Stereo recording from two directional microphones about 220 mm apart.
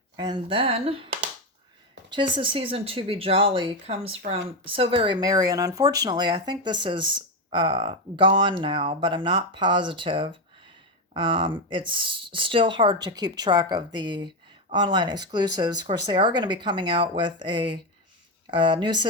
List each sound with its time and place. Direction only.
0.2 s speech: 20° right (ahead or behind)
2.3 s speech: 25° right (ahead or behind)